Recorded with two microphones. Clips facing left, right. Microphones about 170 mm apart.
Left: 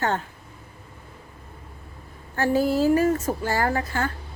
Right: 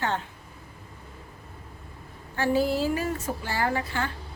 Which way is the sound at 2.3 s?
45° left (ahead or behind).